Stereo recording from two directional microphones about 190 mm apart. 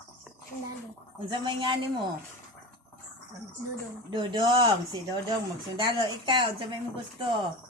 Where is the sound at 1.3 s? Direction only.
25° right (ahead or behind).